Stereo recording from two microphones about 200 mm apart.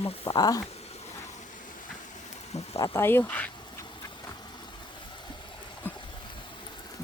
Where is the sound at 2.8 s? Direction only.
10° left (ahead or behind).